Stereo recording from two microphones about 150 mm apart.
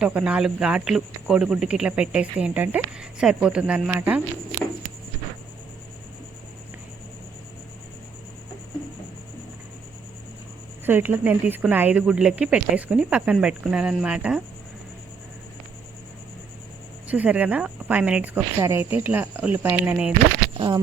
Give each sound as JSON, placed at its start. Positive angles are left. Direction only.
{"t": 0.0, "sound": "speech", "side_deg": -10}
{"t": 10.8, "sound": "speech", "side_deg": -15}
{"t": 17.1, "sound": "speech", "side_deg": -10}
{"t": 20.5, "sound": "speech", "side_deg": -35}